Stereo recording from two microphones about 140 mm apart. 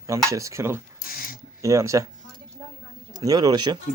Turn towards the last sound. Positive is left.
turn(degrees=-30)  # may be behind; listen again after turning